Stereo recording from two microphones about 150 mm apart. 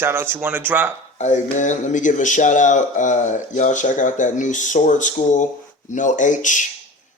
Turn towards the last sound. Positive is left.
turn(degrees=55)  # may be behind; listen again after turning